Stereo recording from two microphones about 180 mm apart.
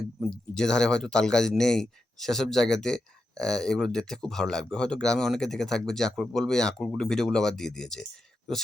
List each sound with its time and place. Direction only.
0.2 s speech: 5° left (ahead or behind)